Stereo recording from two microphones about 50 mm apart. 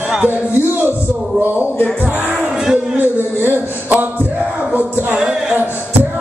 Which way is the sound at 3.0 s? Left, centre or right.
Right.